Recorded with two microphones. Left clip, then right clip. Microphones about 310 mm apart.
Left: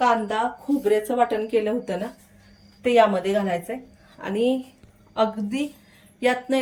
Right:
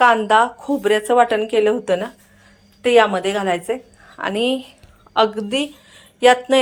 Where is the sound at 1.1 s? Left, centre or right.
Centre.